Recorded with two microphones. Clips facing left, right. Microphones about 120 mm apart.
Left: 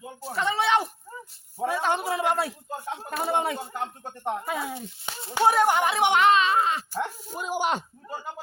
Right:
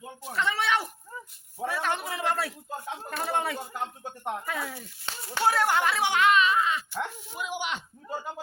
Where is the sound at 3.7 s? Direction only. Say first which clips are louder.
Left 2 dB; centre (ahead or behind).